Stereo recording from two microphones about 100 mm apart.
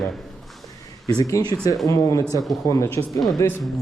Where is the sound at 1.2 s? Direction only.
35° left (ahead or behind).